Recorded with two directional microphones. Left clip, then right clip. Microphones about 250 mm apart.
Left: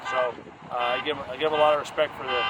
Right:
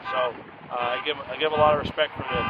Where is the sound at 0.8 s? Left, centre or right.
Centre.